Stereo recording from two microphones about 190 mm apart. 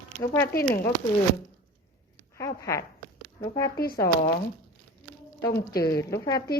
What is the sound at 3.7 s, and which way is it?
Speech, 50° left (ahead or behind).